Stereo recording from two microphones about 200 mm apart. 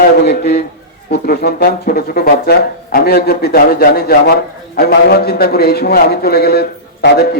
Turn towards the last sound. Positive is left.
turn(degrees=50)  # may be behind; listen again after turning